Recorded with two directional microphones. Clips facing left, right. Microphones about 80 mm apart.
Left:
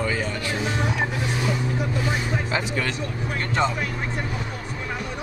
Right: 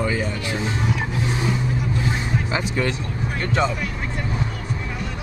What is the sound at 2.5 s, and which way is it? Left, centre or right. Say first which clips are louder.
Music: right 4 dB; right.